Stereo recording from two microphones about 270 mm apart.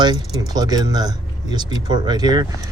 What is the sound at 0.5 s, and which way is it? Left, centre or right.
Speech, centre.